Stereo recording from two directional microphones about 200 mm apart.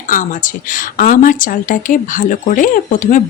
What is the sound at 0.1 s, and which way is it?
Speech, 40° left (ahead or behind).